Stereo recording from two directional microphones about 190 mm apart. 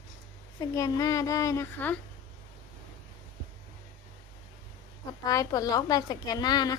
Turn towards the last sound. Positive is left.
turn(degrees=20)  # may be behind; listen again after turning